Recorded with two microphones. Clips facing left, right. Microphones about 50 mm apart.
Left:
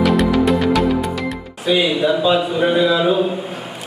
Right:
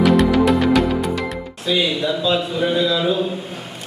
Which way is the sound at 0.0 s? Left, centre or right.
Centre.